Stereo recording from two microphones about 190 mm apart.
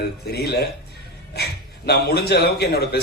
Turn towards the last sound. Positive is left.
turn(degrees=55)  # may be behind; listen again after turning